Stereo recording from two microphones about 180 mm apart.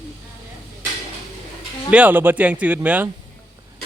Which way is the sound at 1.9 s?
10° right (ahead or behind).